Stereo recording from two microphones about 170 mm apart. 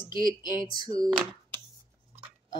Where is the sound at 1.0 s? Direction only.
20° right (ahead or behind).